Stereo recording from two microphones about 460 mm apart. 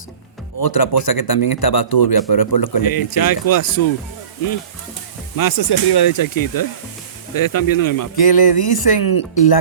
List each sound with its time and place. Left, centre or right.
0.6 s a man's voice: left
5.4 s a man's voice: left